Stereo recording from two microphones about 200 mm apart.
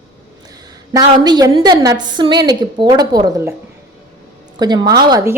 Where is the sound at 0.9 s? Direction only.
20° right (ahead or behind).